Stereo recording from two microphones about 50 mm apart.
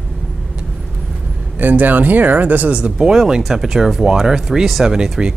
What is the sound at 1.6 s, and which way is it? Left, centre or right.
Speech, right.